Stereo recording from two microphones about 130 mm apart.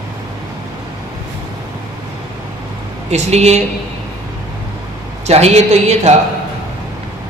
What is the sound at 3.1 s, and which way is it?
Speech, 60° right (ahead or behind).